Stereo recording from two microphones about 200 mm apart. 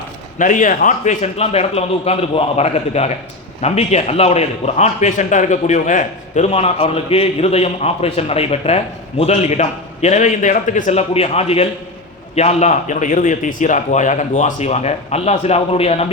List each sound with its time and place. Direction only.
0.3 s a man's voice: 40° left (ahead or behind)